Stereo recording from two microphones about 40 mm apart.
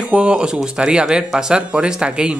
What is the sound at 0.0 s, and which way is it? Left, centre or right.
Speech, right.